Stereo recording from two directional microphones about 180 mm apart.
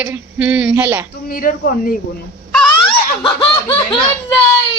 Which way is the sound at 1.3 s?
55° left (ahead or behind).